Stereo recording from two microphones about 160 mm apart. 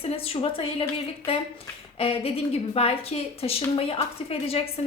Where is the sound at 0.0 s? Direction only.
35° left (ahead or behind).